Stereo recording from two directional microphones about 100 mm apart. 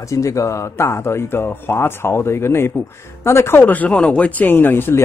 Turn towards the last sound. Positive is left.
turn(degrees=20)  # may be behind; listen again after turning